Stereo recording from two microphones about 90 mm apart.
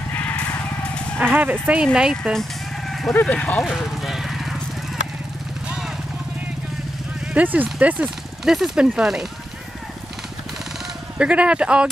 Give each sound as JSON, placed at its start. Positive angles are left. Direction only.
{"t": 0.1, "sound": "vehicle", "side_deg": 15}
{"t": 1.2, "sound": "speech", "side_deg": -20}
{"t": 3.1, "sound": "speech", "side_deg": 25}
{"t": 3.3, "sound": "speech", "side_deg": 10}
{"t": 3.6, "sound": "clip-clop", "side_deg": -5}
{"t": 7.3, "sound": "speech", "side_deg": -15}
{"t": 8.5, "sound": "speech", "side_deg": -5}
{"t": 11.1, "sound": "speech", "side_deg": -10}